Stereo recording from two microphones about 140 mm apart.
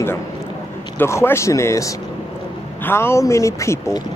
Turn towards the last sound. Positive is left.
turn(degrees=20)  # may be behind; listen again after turning